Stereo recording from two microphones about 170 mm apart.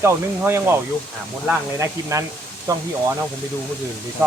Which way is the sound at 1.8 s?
20° right (ahead or behind).